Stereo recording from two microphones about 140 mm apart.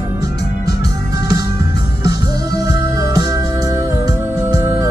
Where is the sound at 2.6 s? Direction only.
25° right (ahead or behind).